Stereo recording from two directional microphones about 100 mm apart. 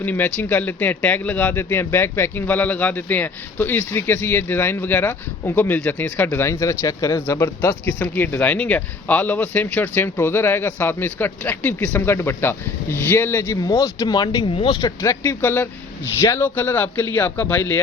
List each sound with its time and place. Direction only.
0.0 s speech: 15° left (ahead or behind); by 14.5 s 45° left (ahead or behind)
14.5 s speech: 65° left (ahead or behind)
14.8 s speech: 40° left (ahead or behind); by 17.7 s 20° left (ahead or behind)